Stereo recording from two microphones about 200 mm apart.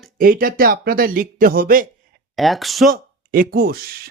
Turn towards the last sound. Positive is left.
turn(degrees=-50)  # may be behind; listen again after turning